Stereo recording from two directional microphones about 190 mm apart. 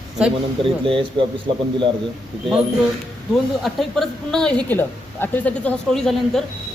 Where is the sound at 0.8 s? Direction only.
25° right (ahead or behind).